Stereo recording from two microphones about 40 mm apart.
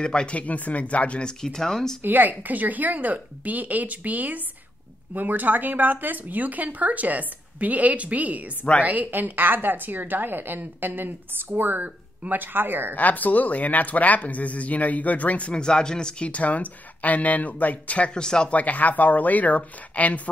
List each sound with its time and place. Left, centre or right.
0.0 s speech: left
1.2 s speech: centre
2.0 s speech: right
9.1 s a woman's voice: right
12.9 s speech: left
15.5 s speech: centre
16.3 s speech: left
18.1 s speech: centre
18.5 s speech: left